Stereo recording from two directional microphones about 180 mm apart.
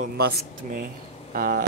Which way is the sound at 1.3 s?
50° right (ahead or behind).